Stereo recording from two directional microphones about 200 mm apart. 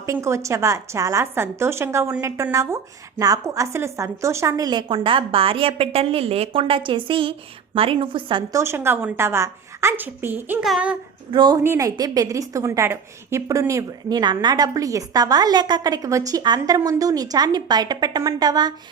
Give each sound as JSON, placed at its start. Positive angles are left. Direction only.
{"t": 0.0, "sound": "a woman's voice", "side_deg": -15}
{"t": 11.3, "sound": "a woman's voice", "side_deg": -20}